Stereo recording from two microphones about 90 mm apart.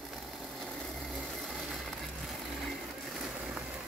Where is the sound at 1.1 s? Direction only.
Centre (ahead or behind).